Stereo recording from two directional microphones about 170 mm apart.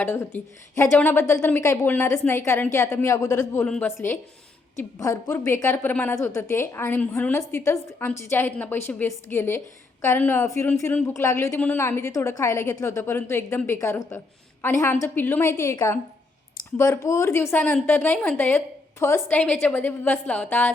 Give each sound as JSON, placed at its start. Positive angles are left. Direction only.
{"t": 0.0, "sound": "a woman's voice", "side_deg": 10}